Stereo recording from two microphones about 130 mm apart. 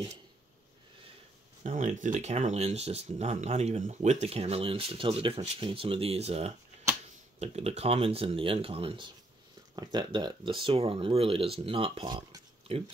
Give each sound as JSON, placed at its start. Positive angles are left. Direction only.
{"t": 1.6, "sound": "speech", "side_deg": -65}